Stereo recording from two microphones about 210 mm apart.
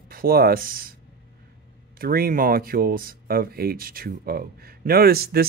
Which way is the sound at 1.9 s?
45° right (ahead or behind).